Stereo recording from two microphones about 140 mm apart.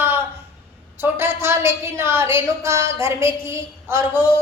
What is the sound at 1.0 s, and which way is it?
A woman's voice, 15° right (ahead or behind).